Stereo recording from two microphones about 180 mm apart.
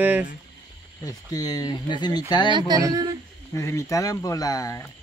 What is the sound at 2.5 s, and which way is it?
Speech, 25° right (ahead or behind).